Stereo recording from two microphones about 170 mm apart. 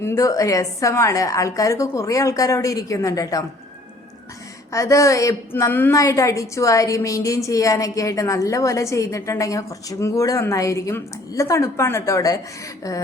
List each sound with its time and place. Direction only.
0.0 s a woman's voice: 15° left (ahead or behind)
4.7 s a woman's voice: 20° left (ahead or behind)